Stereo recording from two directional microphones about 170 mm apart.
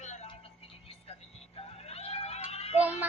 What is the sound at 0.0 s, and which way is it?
Television, 45° left (ahead or behind).